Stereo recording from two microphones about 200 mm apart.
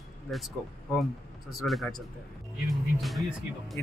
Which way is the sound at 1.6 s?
Centre (ahead or behind).